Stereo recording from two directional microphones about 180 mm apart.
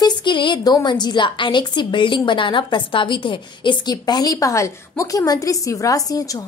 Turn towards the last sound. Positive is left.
turn(degrees=20)  # may be behind; listen again after turning